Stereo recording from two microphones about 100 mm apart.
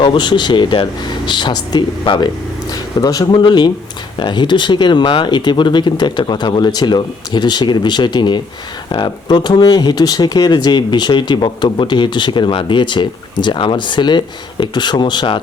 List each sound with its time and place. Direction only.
0.0 s speech: 55° left (ahead or behind)
3.3 s speech: 50° left (ahead or behind)